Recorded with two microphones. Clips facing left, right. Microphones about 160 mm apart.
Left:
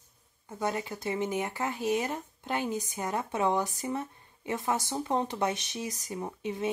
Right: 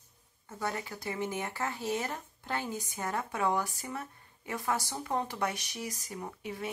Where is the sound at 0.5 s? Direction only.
20° left (ahead or behind).